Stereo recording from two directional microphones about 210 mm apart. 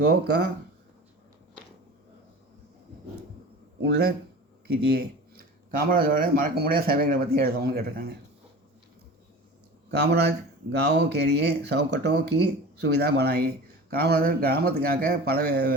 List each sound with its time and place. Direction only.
0.0 s speech: 50° right (ahead or behind)
3.8 s speech: 50° right (ahead or behind)
9.9 s speech: 50° right (ahead or behind)